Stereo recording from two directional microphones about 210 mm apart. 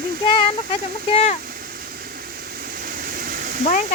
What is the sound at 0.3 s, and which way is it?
Speech, 25° left (ahead or behind).